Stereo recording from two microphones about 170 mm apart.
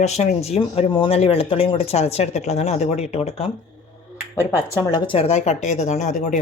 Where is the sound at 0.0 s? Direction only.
40° left (ahead or behind).